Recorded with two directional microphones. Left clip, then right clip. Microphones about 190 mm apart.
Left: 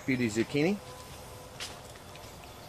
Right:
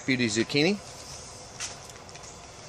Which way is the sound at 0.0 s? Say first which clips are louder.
Right 4 dB; 20° right (ahead or behind).